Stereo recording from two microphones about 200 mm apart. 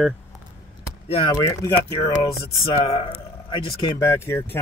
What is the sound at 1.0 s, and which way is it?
Speech, 30° left (ahead or behind).